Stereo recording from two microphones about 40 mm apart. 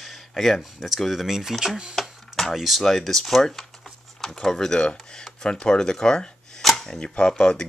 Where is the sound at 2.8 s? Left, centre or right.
Centre.